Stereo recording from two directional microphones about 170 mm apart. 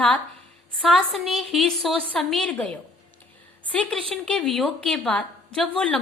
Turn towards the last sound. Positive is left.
turn(degrees=5)  # may be behind; listen again after turning